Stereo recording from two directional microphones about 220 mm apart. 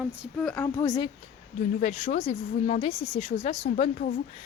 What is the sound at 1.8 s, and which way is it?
A woman's voice, 30° left (ahead or behind).